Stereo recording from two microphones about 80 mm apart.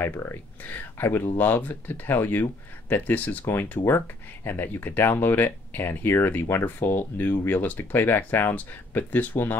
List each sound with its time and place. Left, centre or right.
0.0 s speech: left